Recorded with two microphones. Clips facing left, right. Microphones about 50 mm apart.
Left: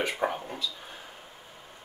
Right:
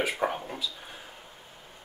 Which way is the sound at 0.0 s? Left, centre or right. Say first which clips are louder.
Even; centre.